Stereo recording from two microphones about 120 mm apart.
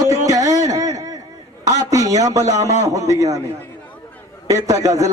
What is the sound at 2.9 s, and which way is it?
Speech, 25° right (ahead or behind).